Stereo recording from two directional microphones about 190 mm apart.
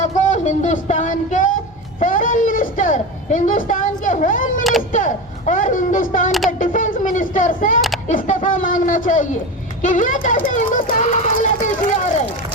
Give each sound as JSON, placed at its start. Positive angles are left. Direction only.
{"t": 0.0, "sound": "music", "side_deg": 40}
{"t": 2.0, "sound": "a woman's voice", "side_deg": 45}